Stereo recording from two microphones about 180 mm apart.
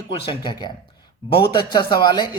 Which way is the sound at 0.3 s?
25° left (ahead or behind).